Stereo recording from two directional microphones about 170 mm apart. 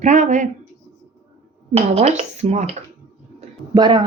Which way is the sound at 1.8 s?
40° right (ahead or behind).